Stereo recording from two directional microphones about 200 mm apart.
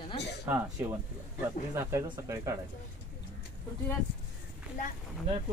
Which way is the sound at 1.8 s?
15° right (ahead or behind).